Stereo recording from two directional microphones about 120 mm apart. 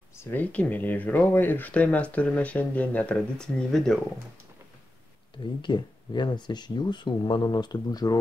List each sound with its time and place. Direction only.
0.2 s speech: 15° left (ahead or behind)
5.4 s speech: 40° left (ahead or behind)